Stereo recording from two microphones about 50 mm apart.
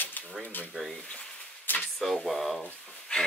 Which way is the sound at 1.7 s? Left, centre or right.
Left.